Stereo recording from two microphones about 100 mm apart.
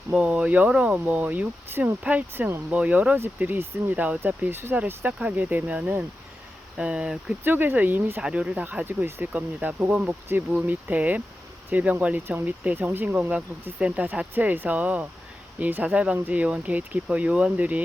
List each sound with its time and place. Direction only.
0.1 s speech: 10° right (ahead or behind)
7.4 s speech: 20° right (ahead or behind)